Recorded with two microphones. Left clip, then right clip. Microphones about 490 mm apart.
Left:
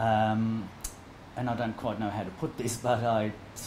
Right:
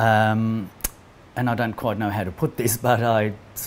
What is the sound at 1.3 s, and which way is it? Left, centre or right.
Speech, right.